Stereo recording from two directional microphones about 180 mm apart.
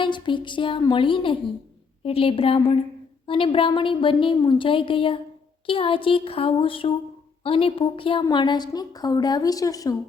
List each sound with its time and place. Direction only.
0.0 s a woman's voice: 25° left (ahead or behind)